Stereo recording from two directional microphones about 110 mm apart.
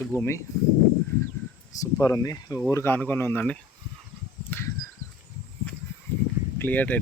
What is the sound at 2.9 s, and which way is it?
Speech, 15° left (ahead or behind).